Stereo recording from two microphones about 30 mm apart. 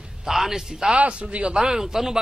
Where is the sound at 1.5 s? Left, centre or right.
Right.